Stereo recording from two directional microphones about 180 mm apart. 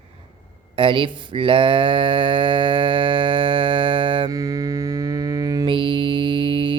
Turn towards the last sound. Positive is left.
turn(degrees=-30)  # may be behind; listen again after turning